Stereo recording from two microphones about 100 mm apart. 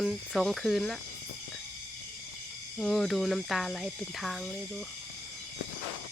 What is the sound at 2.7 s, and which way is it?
Speech, centre (ahead or behind).